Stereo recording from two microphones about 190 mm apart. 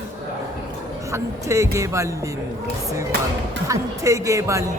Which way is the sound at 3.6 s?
15° right (ahead or behind).